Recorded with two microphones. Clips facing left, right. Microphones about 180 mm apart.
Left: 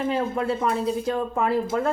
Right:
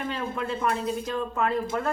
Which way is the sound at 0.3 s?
30° left (ahead or behind).